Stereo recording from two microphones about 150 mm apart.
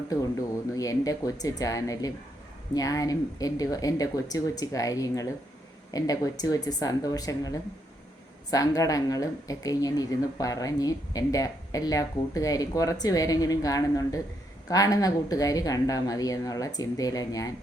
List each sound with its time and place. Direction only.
0.1 s speech: 25° left (ahead or behind)